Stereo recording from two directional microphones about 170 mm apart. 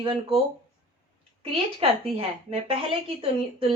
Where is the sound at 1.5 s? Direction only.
35° right (ahead or behind).